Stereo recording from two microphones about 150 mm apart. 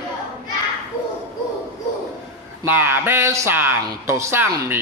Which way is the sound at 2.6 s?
15° right (ahead or behind).